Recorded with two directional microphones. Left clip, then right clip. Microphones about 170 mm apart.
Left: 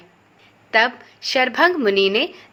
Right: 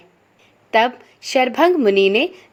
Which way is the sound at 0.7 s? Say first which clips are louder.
Right 1 dB; 45° right (ahead or behind).